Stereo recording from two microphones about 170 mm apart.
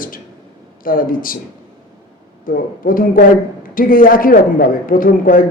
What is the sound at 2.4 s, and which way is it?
Speech, 55° left (ahead or behind).